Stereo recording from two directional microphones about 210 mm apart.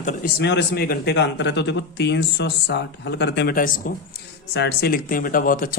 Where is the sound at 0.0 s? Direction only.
40° left (ahead or behind).